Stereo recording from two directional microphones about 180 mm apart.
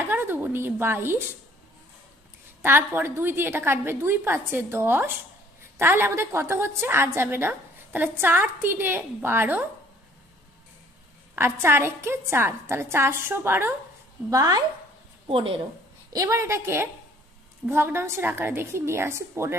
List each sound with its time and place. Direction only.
0.0 s a woman's voice: 10° right (ahead or behind)
2.6 s a woman's voice: 10° right (ahead or behind)
11.6 s a woman's voice: 15° right (ahead or behind); by 15.6 s 30° right (ahead or behind)
16.1 s a woman's voice: 15° right (ahead or behind)